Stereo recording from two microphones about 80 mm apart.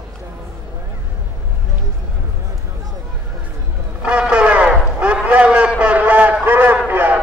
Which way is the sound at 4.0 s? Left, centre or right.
Centre.